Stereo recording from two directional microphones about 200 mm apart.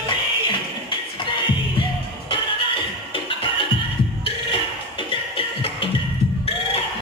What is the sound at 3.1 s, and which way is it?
Music, 25° left (ahead or behind).